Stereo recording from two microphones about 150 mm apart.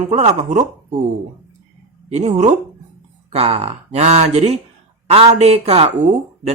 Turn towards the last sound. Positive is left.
turn(degrees=-45)  # may be behind; listen again after turning